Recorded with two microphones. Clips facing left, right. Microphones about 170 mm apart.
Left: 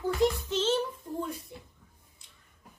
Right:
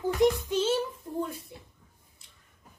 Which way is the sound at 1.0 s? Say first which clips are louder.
Right 1 dB; centre (ahead or behind).